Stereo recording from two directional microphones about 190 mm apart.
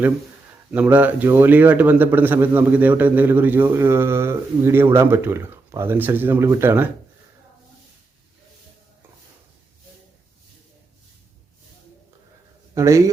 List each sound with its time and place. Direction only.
0.7 s a man's voice: 10° right (ahead or behind)
12.7 s a man's voice: 15° right (ahead or behind)